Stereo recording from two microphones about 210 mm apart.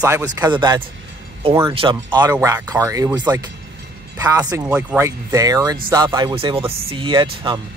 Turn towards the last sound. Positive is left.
turn(degrees=-25)  # may be behind; listen again after turning